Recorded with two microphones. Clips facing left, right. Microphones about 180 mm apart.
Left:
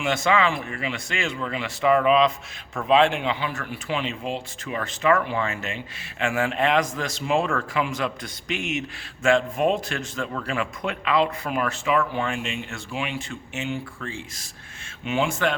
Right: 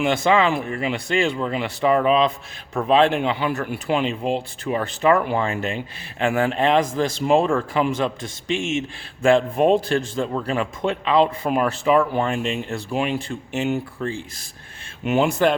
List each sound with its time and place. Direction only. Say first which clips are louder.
0.1 s a man's voice: right 1 dB; 35° right (ahead or behind)